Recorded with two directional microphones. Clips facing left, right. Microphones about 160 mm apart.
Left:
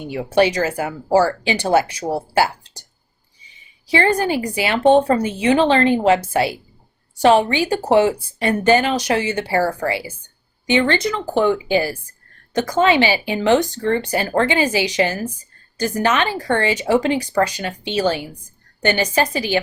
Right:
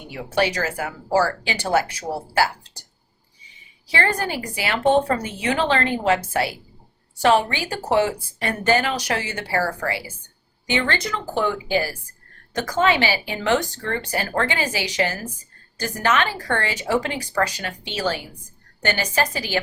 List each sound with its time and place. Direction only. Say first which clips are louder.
0.1 s a woman's voice: left 6 dB; 20° left (ahead or behind)
3.8 s a woman's voice: left 6 dB; 20° left (ahead or behind)